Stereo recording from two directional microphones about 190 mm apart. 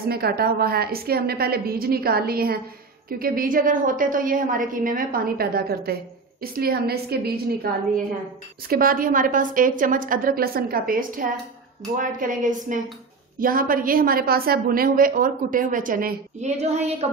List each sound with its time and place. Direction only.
0.1 s a woman's voice: 55° right (ahead or behind)
8.6 s a woman's voice: 50° right (ahead or behind)